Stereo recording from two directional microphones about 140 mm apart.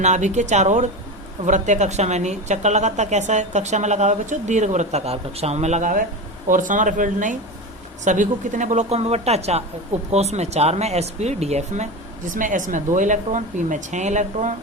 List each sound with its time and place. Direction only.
0.0 s speech: 55° right (ahead or behind)
12.3 s speech: 65° right (ahead or behind)